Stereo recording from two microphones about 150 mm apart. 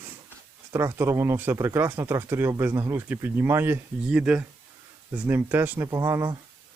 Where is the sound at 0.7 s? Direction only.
15° right (ahead or behind).